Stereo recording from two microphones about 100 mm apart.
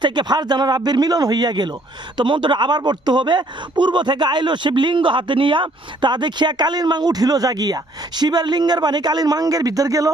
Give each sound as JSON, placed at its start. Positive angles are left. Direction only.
{"t": 0.0, "sound": "speech", "side_deg": -50}